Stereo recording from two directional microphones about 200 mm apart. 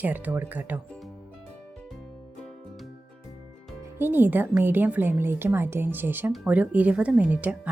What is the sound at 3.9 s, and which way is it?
A woman's voice, 10° right (ahead or behind).